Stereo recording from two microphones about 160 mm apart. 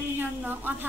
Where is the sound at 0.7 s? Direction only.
10° right (ahead or behind).